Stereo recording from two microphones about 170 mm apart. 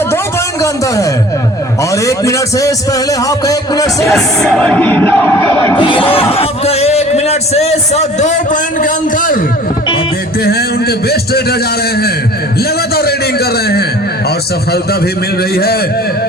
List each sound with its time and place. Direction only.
0.6 s a man's voice: 20° left (ahead or behind)
4.0 s music: centre (ahead or behind)
5.8 s a man's voice: 30° left (ahead or behind); by 9.4 s 55° left (ahead or behind)
10.4 s a man's voice: 65° left (ahead or behind)
12.5 s a man's voice: 65° left (ahead or behind)
15.5 s a man's voice: 65° left (ahead or behind)